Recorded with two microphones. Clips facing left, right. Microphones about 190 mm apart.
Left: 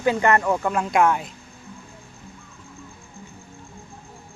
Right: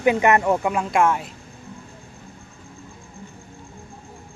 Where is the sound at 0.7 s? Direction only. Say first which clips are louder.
Even; centre (ahead or behind).